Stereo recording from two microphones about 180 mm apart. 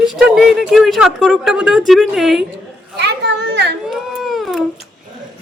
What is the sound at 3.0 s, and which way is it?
Children playing, 70° right (ahead or behind).